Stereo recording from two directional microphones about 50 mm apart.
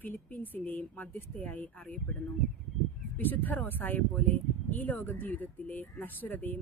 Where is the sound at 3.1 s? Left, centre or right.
Left.